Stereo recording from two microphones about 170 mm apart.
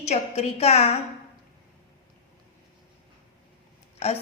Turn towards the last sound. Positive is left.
turn(degrees=40)  # may be behind; listen again after turning